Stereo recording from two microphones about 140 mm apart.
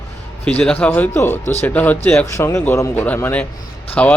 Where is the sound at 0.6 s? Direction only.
10° left (ahead or behind).